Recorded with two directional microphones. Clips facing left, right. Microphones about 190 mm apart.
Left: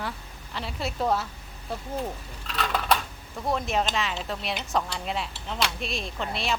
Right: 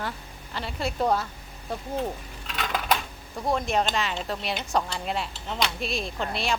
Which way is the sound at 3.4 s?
Centre (ahead or behind).